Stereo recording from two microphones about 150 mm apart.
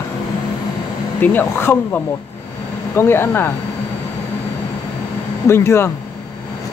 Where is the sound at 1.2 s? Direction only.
15° left (ahead or behind).